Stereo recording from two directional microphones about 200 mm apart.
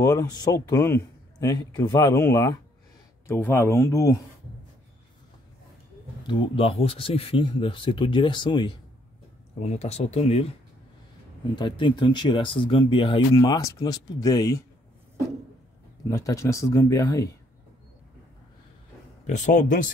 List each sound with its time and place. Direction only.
0.0 s a man's voice: 15° left (ahead or behind)
6.2 s speech: 25° left (ahead or behind)
9.6 s speech: 35° left (ahead or behind)
11.5 s speech: 25° left (ahead or behind)
16.1 s a man's voice: 15° left (ahead or behind)
19.2 s speech: 35° left (ahead or behind)